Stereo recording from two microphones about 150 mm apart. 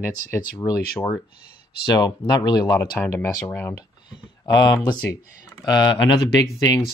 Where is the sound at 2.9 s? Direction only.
15° left (ahead or behind).